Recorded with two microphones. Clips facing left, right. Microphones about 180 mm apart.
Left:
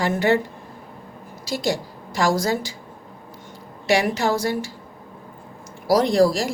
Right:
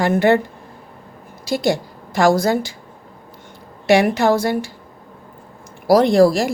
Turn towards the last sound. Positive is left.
turn(degrees=-60)  # may be behind; listen again after turning